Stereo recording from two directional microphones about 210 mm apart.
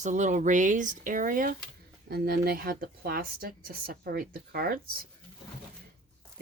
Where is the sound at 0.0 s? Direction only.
35° right (ahead or behind).